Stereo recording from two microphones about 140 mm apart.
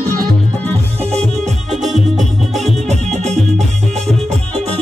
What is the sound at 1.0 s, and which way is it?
Music, 50° right (ahead or behind).